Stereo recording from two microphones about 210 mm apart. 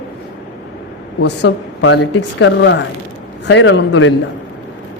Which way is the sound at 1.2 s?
55° left (ahead or behind).